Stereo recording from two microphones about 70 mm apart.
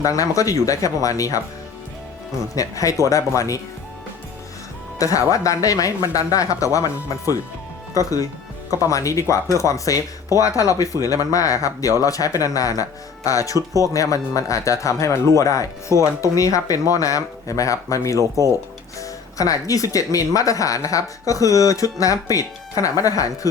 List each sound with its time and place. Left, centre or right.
0.0 s speech: left
2.6 s speech: left
4.9 s speech: left
7.9 s speech: left
18.2 s speech: right
18.9 s speech: left